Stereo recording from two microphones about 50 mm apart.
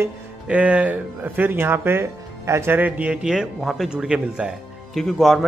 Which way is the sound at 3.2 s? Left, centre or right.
Centre.